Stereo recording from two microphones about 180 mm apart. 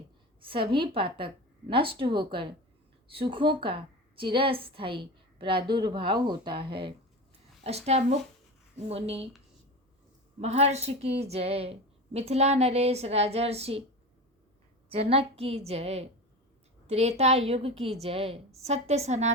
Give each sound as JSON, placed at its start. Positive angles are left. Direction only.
{"t": 0.4, "sound": "a woman's voice", "side_deg": -30}
{"t": 10.4, "sound": "a woman's voice", "side_deg": -35}
{"t": 14.8, "sound": "a woman's voice", "side_deg": -35}